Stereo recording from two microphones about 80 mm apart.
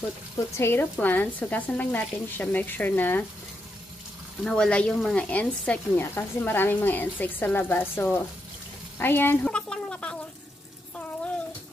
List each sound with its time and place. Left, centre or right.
0.6 s speech: left
4.4 s speech: centre
5.9 s speech: left
9.4 s a sound: centre